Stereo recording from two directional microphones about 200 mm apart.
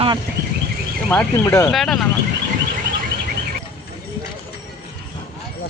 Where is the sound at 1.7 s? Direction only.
Centre (ahead or behind).